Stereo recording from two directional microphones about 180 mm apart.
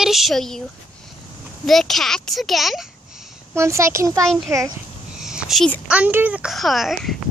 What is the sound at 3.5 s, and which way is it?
Speech, 15° right (ahead or behind).